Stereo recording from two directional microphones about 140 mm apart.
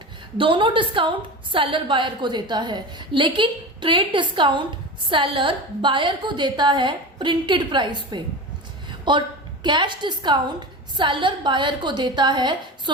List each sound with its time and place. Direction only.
0.3 s a woman's voice: 35° right (ahead or behind)